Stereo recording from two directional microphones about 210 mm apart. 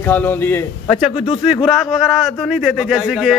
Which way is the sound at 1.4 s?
Centre (ahead or behind).